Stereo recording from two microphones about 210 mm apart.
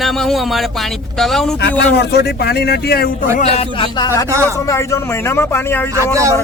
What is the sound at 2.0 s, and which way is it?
Speech, 50° left (ahead or behind).